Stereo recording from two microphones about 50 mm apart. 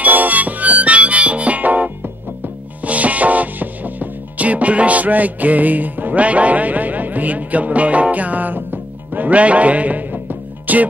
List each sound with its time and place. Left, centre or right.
0.0 s harmonica: right
2.8 s music: right
10.7 s speech: right